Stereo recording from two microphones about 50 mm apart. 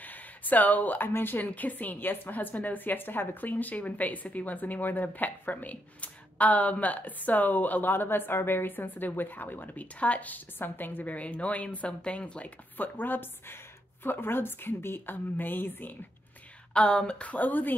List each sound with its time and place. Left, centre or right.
0.0 s a woman's voice: left
12.7 s a woman's voice: left
16.7 s a woman's voice: centre; by 17.7 s left